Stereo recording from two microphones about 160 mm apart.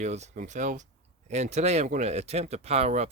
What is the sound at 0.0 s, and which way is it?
Speech, 45° right (ahead or behind).